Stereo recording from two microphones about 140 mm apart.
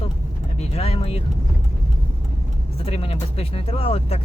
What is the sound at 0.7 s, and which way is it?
Speech, 45° left (ahead or behind).